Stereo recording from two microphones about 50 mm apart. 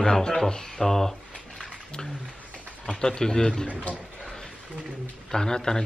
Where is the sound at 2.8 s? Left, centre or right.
Centre.